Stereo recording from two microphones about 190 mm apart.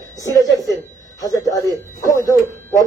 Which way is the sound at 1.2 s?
20° left (ahead or behind).